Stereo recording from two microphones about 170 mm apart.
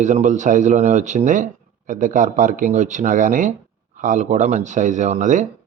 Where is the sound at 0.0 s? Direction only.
45° right (ahead or behind).